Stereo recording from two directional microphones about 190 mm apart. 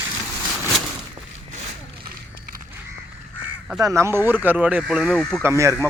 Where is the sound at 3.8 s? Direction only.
15° right (ahead or behind).